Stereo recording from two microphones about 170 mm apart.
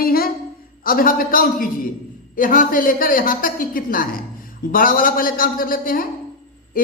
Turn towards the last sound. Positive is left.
turn(degrees=60)  # may be behind; listen again after turning